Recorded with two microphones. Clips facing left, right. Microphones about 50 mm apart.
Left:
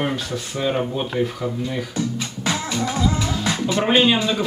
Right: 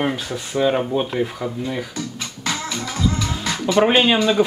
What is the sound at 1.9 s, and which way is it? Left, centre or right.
Music, centre.